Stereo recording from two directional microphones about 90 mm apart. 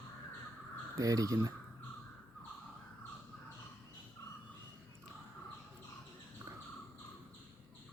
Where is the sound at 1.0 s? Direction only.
40° right (ahead or behind).